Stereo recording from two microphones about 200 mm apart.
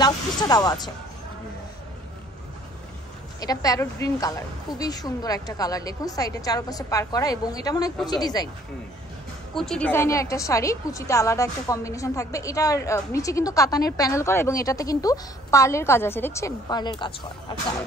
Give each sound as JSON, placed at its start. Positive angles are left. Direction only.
{"t": 0.0, "sound": "speech", "side_deg": 20}
{"t": 3.3, "sound": "a woman's voice", "side_deg": 20}
{"t": 9.6, "sound": "a woman's voice", "side_deg": 5}